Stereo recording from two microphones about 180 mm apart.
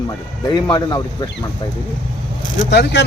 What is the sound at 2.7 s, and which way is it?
Speech, 70° left (ahead or behind).